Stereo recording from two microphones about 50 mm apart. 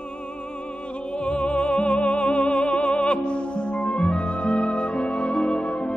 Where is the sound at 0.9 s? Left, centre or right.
Left.